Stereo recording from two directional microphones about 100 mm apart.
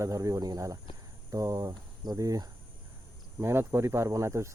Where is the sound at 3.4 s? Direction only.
25° right (ahead or behind).